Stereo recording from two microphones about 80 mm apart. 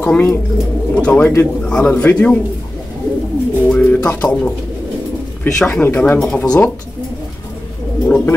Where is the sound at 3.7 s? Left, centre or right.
Centre.